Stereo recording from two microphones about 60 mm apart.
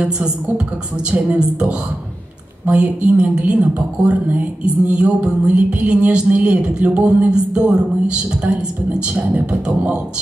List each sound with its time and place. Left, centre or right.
1.1 s a woman's voice: centre
4.9 s music: centre
9.3 s a woman's voice: right